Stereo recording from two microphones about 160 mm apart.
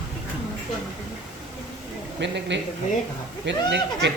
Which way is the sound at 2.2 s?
90° right.